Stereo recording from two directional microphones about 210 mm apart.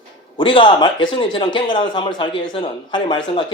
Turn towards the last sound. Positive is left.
turn(degrees=20)  # may be behind; listen again after turning